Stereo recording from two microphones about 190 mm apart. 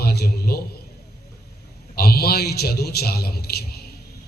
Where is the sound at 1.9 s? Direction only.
55° left (ahead or behind).